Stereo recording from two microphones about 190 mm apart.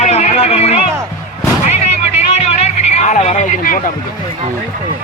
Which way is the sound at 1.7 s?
35° left (ahead or behind).